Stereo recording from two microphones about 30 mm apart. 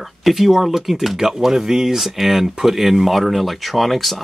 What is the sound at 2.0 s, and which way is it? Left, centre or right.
Speech, centre.